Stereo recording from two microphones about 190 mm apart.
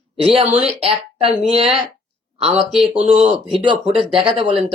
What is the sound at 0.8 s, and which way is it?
A woman's voice, 30° right (ahead or behind).